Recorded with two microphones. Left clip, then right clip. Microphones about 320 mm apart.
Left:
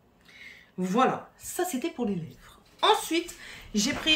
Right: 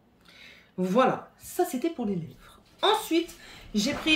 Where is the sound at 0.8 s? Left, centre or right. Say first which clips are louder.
Right 1 dB; centre.